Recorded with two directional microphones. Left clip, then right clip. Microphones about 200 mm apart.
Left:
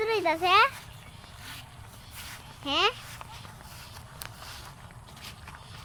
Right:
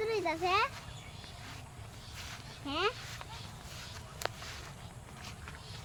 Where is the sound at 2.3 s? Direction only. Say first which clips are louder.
Left 9 dB; 60° left (ahead or behind).